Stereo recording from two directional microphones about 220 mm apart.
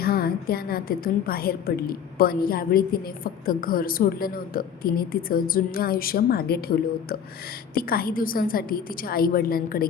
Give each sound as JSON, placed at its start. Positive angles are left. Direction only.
{"t": 0.0, "sound": "a woman's voice", "side_deg": 45}